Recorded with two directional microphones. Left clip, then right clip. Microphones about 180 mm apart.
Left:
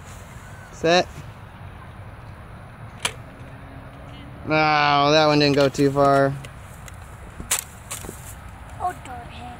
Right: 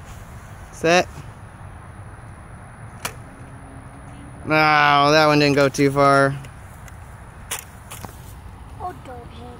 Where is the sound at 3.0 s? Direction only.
5° left (ahead or behind).